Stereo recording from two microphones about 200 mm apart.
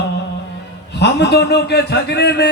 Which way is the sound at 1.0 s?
55° left (ahead or behind).